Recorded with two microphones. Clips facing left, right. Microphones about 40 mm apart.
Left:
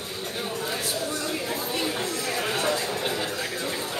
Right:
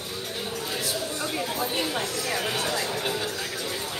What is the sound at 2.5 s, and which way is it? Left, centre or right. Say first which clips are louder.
Music: left 2 dB; left.